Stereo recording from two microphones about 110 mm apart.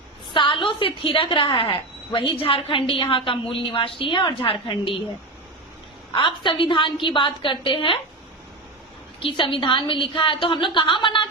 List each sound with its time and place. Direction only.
0.3 s a woman's voice: 50° left (ahead or behind)
6.1 s a woman's voice: 50° left (ahead or behind)
9.2 s a woman's voice: 50° left (ahead or behind)